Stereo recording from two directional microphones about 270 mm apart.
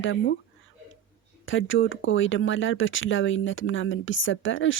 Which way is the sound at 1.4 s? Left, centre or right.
Left.